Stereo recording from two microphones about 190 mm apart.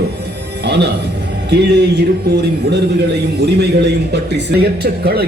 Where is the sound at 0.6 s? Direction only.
60° right (ahead or behind).